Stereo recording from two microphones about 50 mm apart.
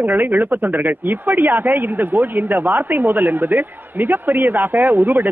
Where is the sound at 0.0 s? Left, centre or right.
Right.